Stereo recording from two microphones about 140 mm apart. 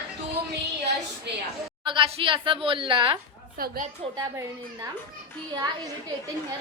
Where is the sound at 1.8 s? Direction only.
35° right (ahead or behind).